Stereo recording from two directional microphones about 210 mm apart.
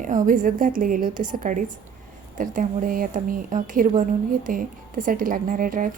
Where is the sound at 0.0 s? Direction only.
40° right (ahead or behind).